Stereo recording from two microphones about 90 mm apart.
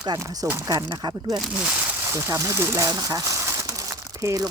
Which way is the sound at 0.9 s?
55° right (ahead or behind).